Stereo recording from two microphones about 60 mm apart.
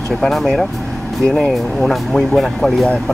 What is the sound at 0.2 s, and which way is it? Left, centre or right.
Speech, centre.